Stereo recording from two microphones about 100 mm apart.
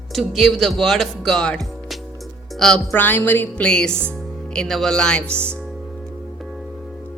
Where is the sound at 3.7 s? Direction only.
10° left (ahead or behind).